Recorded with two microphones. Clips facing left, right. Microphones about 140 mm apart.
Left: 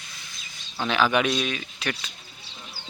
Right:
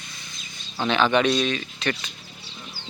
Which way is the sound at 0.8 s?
5° left (ahead or behind).